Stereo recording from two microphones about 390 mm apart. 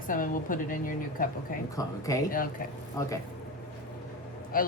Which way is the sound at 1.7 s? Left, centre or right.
Centre.